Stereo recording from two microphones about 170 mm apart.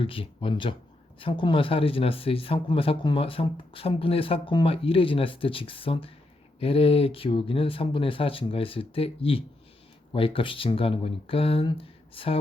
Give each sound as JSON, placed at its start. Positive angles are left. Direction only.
{"t": 0.0, "sound": "speech", "side_deg": 30}